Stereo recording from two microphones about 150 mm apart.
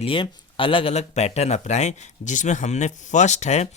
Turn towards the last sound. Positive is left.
turn(degrees=50)  # may be behind; listen again after turning